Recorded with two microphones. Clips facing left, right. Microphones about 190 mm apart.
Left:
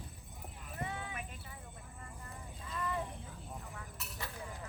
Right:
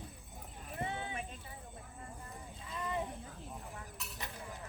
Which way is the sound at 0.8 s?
25° right (ahead or behind).